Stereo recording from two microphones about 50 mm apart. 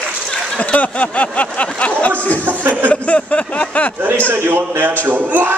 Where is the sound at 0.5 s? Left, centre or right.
Left.